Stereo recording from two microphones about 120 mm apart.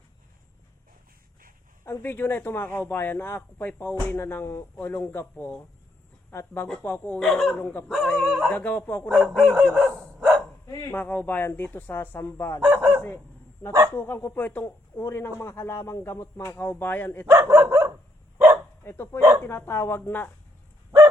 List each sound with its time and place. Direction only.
1.8 s speech: 20° left (ahead or behind); by 7.7 s 5° left (ahead or behind)
7.9 s chicken: 5° left (ahead or behind)
9.0 s chicken: 5° right (ahead or behind)
10.2 s dog: 5° right (ahead or behind)
10.9 s speech: 15° left (ahead or behind)
12.6 s speech: 15° right (ahead or behind)
13.0 s dog: 15° left (ahead or behind)
13.9 s speech: 20° left (ahead or behind)
17.2 s dog: 20° right (ahead or behind)
18.9 s speech: 20° left (ahead or behind)